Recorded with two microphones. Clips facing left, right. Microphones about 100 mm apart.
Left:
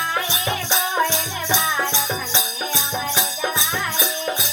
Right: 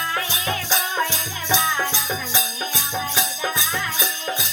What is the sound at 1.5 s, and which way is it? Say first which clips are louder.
Music: even; 15° left (ahead or behind).